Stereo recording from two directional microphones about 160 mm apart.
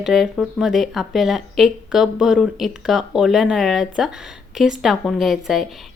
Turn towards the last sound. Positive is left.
turn(degrees=0)  # may be behind; listen again after turning